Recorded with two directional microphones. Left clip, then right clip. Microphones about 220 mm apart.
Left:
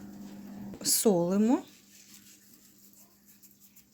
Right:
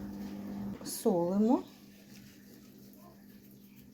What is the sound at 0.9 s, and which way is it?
Speech, 45° left (ahead or behind).